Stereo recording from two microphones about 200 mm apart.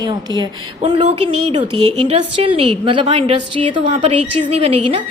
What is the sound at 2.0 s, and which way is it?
A woman's voice, 25° right (ahead or behind).